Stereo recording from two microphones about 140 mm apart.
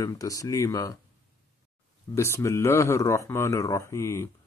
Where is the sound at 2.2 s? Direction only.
20° left (ahead or behind).